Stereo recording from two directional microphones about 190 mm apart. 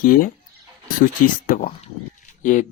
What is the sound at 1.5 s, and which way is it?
Speech, 45° left (ahead or behind).